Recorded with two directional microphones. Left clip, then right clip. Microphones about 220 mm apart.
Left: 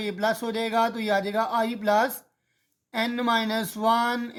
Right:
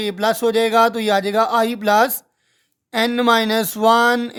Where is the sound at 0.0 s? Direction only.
40° right (ahead or behind).